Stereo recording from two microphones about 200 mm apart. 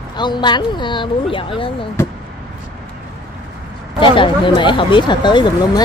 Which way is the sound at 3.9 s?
25° left (ahead or behind).